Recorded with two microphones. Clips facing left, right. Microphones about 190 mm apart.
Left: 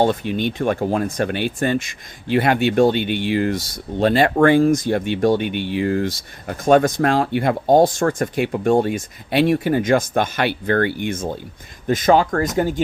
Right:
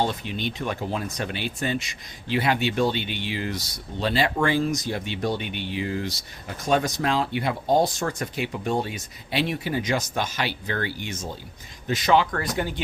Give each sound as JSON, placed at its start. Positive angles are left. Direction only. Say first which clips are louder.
{"t": 0.0, "sound": "speech", "louder": "left 8 dB", "side_deg": 50}